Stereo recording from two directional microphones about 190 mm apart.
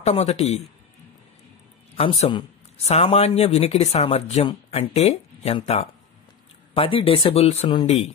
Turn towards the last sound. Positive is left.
turn(degrees=35)  # may be behind; listen again after turning